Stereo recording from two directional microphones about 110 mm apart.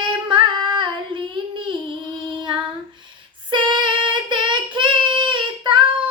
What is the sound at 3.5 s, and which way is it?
Child singing, 45° right (ahead or behind).